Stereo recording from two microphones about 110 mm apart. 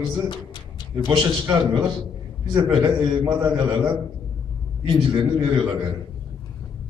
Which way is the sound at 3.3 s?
40° right (ahead or behind).